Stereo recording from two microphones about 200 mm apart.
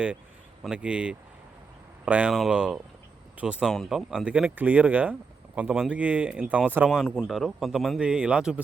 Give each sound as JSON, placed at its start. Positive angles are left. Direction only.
{"t": 0.6, "sound": "speech", "side_deg": -5}